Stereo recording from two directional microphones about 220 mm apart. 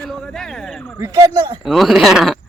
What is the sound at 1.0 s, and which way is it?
Speech, 20° right (ahead or behind).